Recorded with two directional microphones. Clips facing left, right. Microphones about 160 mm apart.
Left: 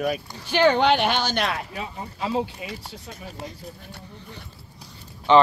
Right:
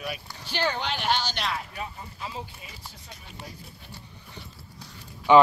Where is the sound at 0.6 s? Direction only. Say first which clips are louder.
Left 11 dB; 70° left (ahead or behind).